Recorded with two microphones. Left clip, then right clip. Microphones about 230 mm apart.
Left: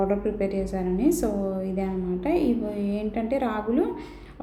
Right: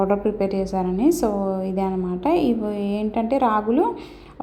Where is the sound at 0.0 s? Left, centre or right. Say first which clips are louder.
Right 4 dB; right.